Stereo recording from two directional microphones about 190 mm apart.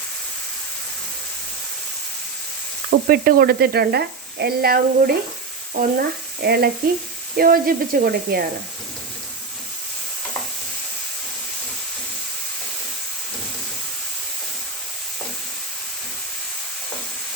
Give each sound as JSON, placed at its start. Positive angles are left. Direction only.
{"t": 3.1, "sound": "speech", "side_deg": -50}